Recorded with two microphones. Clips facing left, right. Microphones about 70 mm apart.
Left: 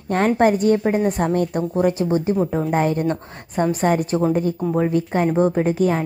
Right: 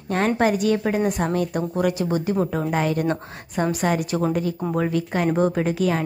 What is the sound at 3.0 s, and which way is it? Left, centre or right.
Speech, centre.